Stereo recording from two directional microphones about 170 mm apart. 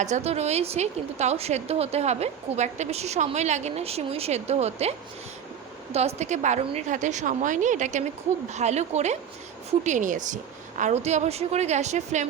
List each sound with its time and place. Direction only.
0.0 s a woman's voice: 40° right (ahead or behind)